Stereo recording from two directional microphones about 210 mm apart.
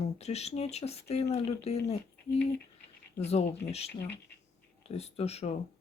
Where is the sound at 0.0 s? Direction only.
30° left (ahead or behind).